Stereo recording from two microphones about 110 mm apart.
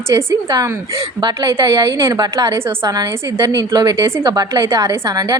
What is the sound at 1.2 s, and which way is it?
A woman's voice, 40° right (ahead or behind).